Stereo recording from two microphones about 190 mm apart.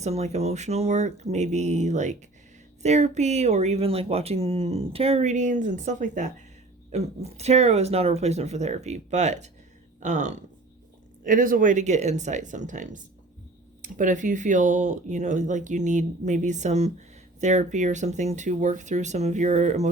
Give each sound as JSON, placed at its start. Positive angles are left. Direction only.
{"t": 0.0, "sound": "speech", "side_deg": -35}